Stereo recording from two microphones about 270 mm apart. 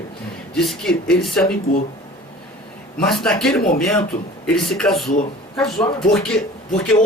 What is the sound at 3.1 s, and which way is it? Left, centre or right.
Speech, centre.